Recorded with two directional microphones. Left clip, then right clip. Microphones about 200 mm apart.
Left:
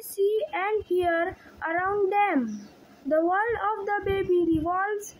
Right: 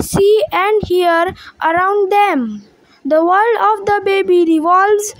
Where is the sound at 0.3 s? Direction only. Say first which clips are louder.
Right 14 dB; 50° right (ahead or behind).